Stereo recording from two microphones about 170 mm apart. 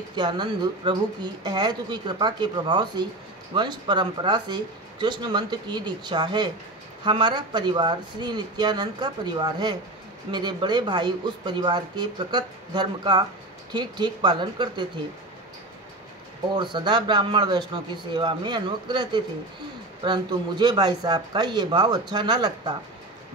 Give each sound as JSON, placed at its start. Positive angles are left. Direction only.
{"t": 0.1, "sound": "speech", "side_deg": -25}
{"t": 16.5, "sound": "speech", "side_deg": -25}